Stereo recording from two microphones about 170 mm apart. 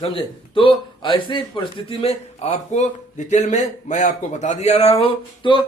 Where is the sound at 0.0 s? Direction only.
30° left (ahead or behind).